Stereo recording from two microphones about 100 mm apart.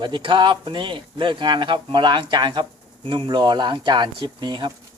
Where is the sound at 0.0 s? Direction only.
55° right (ahead or behind).